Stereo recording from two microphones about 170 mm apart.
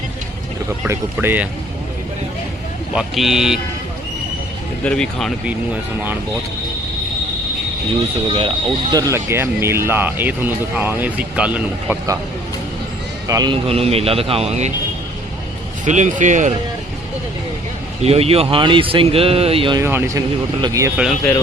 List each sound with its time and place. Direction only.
0.9 s speech: 10° right (ahead or behind)
2.9 s speech: 5° right (ahead or behind)
4.8 s speech: 5° left (ahead or behind)
8.3 s speech: 30° right (ahead or behind); by 11.9 s 5° right (ahead or behind)
13.2 s speech: 20° right (ahead or behind)
13.7 s speech: 35° right (ahead or behind)
15.9 s speech: 45° right (ahead or behind)
18.0 s speech: 35° right (ahead or behind)
19.8 s speech: 15° right (ahead or behind)
20.9 s speech: 5° right (ahead or behind)